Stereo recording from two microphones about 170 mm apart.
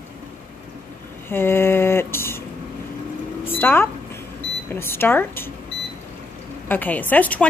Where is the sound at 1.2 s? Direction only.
15° left (ahead or behind).